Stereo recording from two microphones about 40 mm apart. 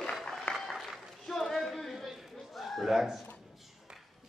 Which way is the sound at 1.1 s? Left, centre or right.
Centre.